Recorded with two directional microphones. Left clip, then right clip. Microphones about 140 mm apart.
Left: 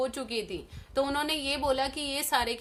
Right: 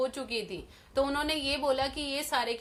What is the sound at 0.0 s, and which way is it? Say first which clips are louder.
A woman's voice: even; 40° left (ahead or behind).